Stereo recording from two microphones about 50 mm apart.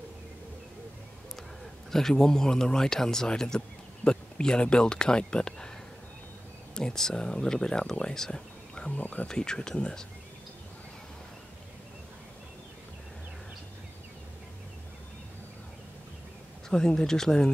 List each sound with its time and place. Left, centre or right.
1.9 s speech: centre
6.7 s speech: centre
8.9 s speech: left
9.3 s speech: centre
16.6 s speech: centre